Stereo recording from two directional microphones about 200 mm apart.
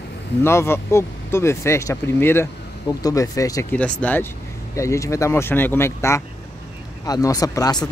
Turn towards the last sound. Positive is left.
turn(degrees=15)  # may be behind; listen again after turning